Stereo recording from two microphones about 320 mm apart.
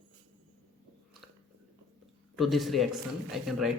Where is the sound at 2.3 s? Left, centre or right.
Centre.